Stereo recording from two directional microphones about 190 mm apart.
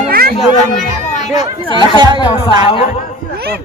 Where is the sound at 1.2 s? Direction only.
35° left (ahead or behind).